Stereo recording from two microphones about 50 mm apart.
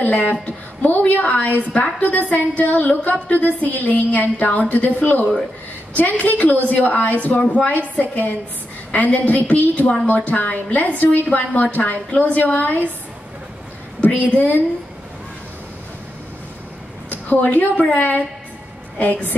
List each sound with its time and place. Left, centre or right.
0.0 s a woman's voice: left
14.3 s a woman's voice: left
17.3 s a woman's voice: left